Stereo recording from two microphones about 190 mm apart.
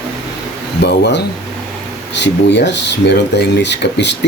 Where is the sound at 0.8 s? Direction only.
65° left (ahead or behind).